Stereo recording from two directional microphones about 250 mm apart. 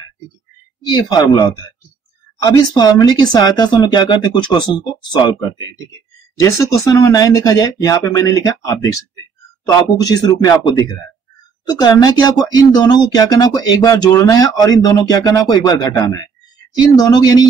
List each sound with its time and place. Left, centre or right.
0.8 s speech: centre
2.5 s speech: centre
6.4 s speech: centre